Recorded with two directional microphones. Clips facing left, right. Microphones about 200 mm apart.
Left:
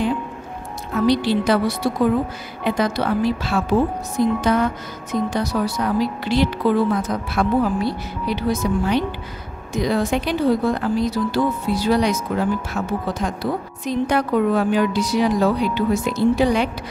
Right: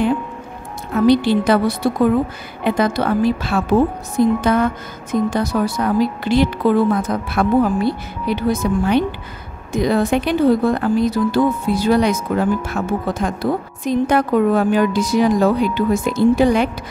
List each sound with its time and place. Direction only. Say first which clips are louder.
1.0 s a woman's voice: right 4 dB; 55° right (ahead or behind)